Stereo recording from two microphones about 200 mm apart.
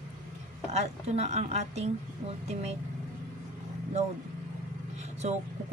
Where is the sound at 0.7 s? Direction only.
35° right (ahead or behind).